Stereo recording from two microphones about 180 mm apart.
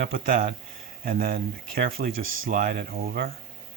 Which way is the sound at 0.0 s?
50° right (ahead or behind).